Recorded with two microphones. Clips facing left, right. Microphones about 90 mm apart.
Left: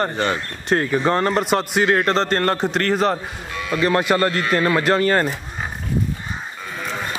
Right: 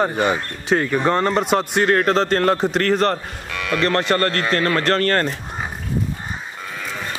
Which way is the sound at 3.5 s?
65° right (ahead or behind).